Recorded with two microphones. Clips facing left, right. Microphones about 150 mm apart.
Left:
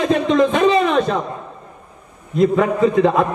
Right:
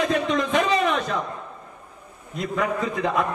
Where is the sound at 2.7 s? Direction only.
25° left (ahead or behind).